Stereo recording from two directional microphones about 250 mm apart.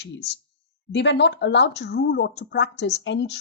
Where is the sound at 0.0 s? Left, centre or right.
Left.